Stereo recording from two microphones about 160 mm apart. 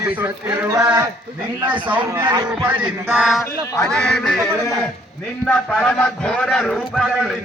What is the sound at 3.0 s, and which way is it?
Speech, 10° right (ahead or behind).